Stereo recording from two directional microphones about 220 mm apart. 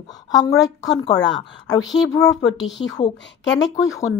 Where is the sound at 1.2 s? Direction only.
55° left (ahead or behind).